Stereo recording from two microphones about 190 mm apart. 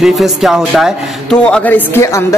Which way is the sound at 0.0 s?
Centre (ahead or behind).